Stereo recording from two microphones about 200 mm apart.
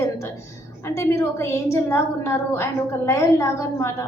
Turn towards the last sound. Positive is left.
turn(degrees=15)  # may be behind; listen again after turning